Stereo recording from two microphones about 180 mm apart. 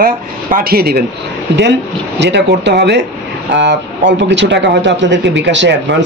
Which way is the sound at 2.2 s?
70° right (ahead or behind).